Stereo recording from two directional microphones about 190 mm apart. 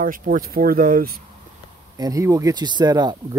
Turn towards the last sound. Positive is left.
turn(degrees=-20)  # may be behind; listen again after turning